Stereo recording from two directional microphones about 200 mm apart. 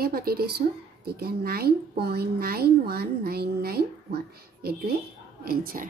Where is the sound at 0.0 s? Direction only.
50° right (ahead or behind).